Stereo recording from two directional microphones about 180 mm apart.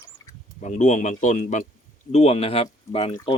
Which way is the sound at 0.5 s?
40° left (ahead or behind).